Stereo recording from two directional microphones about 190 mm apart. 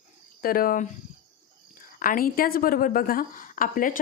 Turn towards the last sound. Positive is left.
turn(degrees=45)  # may be behind; listen again after turning